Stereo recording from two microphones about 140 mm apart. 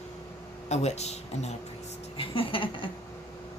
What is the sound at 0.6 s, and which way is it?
Speech, 50° left (ahead or behind).